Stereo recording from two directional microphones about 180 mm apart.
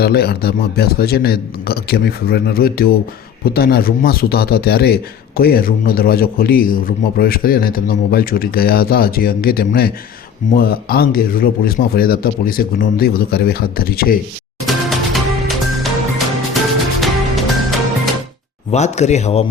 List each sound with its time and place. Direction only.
0.0 s a man's voice: 60° left (ahead or behind)
14.7 s music: centre (ahead or behind)
18.7 s a man's voice: 40° left (ahead or behind)